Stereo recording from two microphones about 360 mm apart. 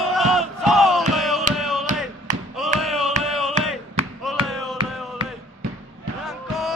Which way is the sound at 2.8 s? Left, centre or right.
Centre.